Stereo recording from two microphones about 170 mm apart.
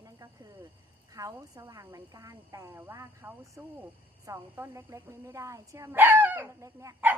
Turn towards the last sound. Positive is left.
turn(degrees=-15)  # may be behind; listen again after turning